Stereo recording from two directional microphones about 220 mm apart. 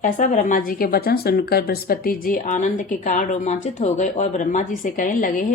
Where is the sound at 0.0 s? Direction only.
35° left (ahead or behind).